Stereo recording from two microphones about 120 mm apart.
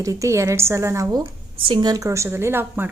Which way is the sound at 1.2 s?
40° right (ahead or behind).